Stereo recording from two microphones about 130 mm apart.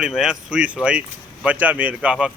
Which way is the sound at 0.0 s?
5° right (ahead or behind).